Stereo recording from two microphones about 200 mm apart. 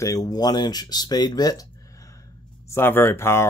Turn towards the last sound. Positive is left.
turn(degrees=10)  # may be behind; listen again after turning